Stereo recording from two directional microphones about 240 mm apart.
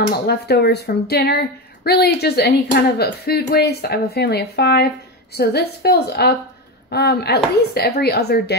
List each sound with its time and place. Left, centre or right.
0.3 s a woman's voice: left